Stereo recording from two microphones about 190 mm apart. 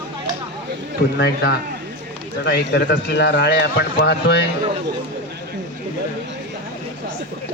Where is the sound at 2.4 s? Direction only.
60° left (ahead or behind).